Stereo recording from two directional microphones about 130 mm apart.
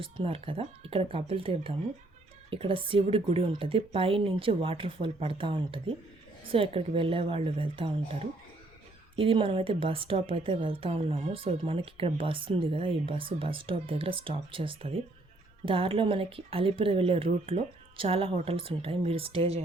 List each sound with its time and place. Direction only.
0.0 s a woman's voice: 45° right (ahead or behind)